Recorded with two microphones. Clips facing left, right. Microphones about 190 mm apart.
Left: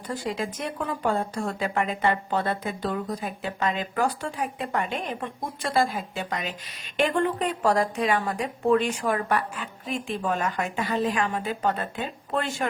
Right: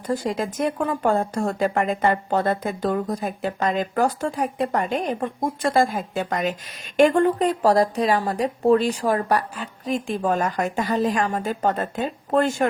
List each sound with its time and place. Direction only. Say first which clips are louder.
0.1 s speech: right 5 dB; 45° right (ahead or behind)